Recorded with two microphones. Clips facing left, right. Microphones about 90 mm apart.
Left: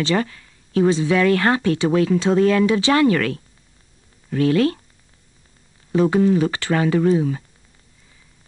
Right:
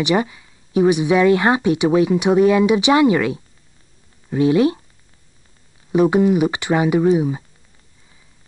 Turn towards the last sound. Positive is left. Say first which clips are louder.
# right 2 dB
turn(degrees=-15)  # may be behind; listen again after turning